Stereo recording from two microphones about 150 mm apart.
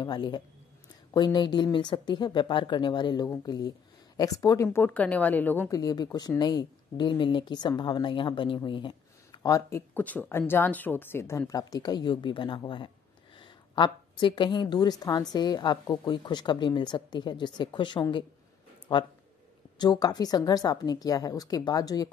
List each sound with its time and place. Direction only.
0.0 s a woman's voice: 30° left (ahead or behind)